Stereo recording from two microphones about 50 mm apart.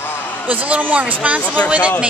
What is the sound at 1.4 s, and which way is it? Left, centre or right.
Speech, left.